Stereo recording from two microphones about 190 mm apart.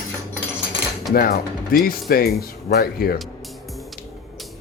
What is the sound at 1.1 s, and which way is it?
Speech, 50° left (ahead or behind).